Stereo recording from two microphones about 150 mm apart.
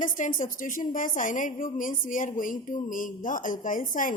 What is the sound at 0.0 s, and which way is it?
A woman's voice, 60° left (ahead or behind).